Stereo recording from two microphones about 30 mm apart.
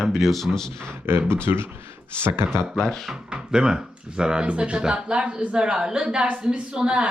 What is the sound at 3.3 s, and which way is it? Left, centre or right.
Speech, right.